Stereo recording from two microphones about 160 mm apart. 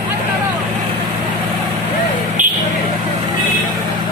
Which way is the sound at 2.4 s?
55° right (ahead or behind).